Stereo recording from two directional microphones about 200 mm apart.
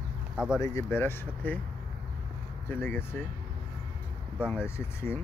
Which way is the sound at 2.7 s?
10° left (ahead or behind).